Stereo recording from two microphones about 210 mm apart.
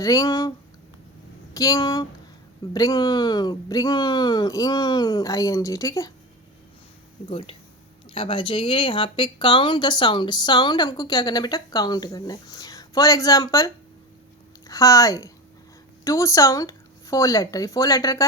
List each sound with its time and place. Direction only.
0.0 s speech: 15° left (ahead or behind)
1.5 s speech: 15° left (ahead or behind)
7.3 s speech: 25° left (ahead or behind)
14.7 s speech: 15° left (ahead or behind)